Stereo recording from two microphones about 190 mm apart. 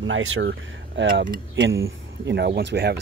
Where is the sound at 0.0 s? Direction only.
90° right; by 1.2 s 70° right (ahead or behind).